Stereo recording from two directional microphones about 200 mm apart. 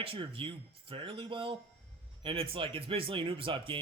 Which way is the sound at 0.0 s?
25° right (ahead or behind).